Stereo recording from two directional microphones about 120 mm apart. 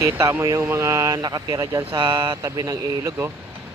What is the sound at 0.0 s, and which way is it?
Speech, 25° right (ahead or behind).